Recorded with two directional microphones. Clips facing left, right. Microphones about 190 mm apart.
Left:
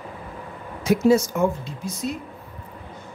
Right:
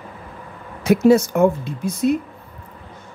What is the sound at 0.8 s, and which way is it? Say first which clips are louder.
Speech: right 4 dB; 60° right (ahead or behind).